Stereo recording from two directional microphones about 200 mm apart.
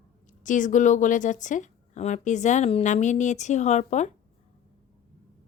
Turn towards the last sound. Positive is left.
turn(degrees=35)  # may be behind; listen again after turning